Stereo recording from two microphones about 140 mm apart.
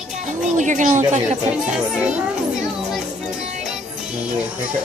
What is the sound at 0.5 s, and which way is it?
Speech, 65° right (ahead or behind).